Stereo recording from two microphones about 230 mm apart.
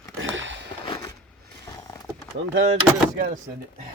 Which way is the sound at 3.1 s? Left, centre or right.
Right.